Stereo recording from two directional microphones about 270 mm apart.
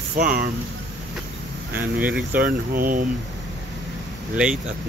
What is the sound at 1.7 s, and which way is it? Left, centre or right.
Speech, centre.